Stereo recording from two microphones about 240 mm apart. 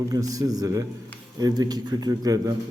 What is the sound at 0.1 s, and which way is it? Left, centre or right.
A man's voice, centre.